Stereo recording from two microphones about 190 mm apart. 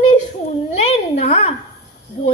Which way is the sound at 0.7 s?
35° left (ahead or behind).